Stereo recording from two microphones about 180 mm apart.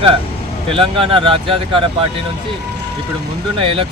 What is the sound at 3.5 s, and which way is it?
Speech, 30° right (ahead or behind).